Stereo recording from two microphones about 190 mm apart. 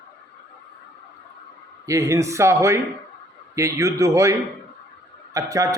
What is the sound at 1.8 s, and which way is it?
A man's voice, 15° right (ahead or behind).